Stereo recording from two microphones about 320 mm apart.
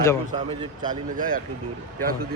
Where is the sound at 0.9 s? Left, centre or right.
Right.